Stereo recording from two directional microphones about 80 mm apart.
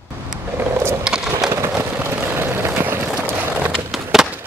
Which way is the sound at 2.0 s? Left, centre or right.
Right.